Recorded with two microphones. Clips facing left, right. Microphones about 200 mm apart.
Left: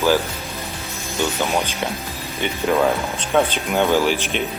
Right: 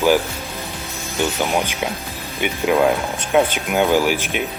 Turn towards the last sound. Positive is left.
turn(degrees=-10)  # may be behind; listen again after turning